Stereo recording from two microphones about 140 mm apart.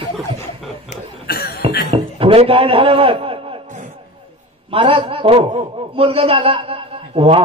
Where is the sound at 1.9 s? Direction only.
40° right (ahead or behind).